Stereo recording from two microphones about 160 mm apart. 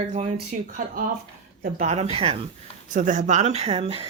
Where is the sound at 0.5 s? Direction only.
55° right (ahead or behind).